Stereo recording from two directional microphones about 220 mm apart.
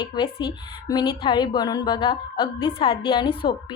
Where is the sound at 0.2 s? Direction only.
20° left (ahead or behind).